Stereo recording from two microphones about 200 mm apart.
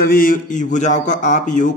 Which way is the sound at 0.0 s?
45° left (ahead or behind).